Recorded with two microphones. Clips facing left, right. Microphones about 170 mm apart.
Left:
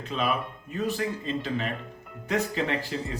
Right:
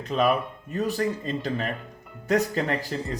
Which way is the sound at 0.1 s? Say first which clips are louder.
Right 6 dB; 45° right (ahead or behind).